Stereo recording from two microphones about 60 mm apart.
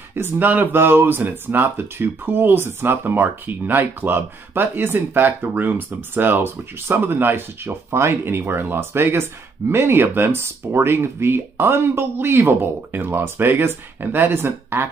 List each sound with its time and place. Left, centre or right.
0.1 s speech: right